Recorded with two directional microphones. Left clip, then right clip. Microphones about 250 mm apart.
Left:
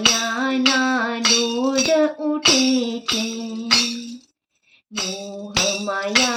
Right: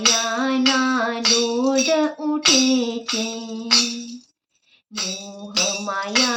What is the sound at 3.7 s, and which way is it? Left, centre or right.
Music, left.